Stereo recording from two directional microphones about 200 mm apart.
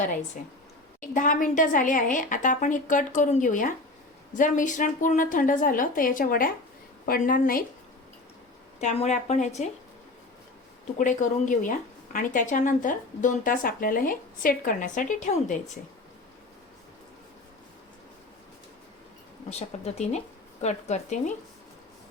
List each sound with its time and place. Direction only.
1.1 s a woman's voice: 40° left (ahead or behind)
8.8 s speech: 35° left (ahead or behind)
10.9 s speech: 40° left (ahead or behind)
19.5 s speech: 30° left (ahead or behind)